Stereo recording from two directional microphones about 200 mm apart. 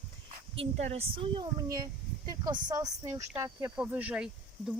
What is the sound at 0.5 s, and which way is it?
Speech, 30° right (ahead or behind).